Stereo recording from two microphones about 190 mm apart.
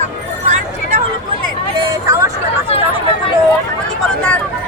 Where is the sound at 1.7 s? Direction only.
15° right (ahead or behind).